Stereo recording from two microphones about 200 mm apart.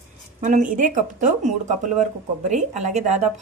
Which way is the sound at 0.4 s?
40° right (ahead or behind).